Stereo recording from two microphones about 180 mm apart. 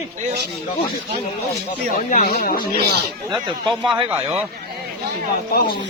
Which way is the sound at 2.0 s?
45° left (ahead or behind).